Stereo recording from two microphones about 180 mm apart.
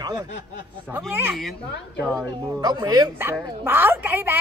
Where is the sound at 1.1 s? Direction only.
10° right (ahead or behind).